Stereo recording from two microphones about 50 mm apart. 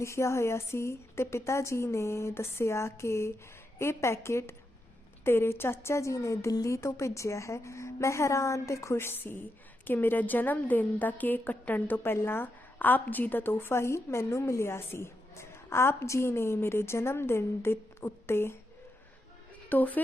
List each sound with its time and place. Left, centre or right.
0.0 s a woman's voice: left
5.2 s a woman's voice: left
9.0 s a woman's voice: left
12.1 s a woman's voice: left
13.5 s a woman's voice: left
19.7 s a woman's voice: left